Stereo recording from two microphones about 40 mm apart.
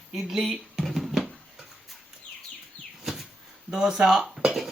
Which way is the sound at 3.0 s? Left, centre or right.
Centre.